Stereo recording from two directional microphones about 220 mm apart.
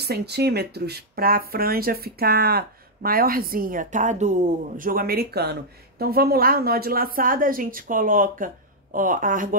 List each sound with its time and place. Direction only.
0.0 s speech: 50° right (ahead or behind)